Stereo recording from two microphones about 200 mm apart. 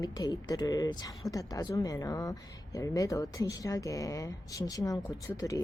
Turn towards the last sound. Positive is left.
turn(degrees=15)  # may be behind; listen again after turning